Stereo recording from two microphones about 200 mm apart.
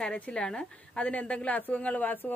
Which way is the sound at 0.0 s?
5° left (ahead or behind).